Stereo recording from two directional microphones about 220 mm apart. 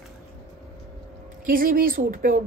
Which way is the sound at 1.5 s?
40° right (ahead or behind).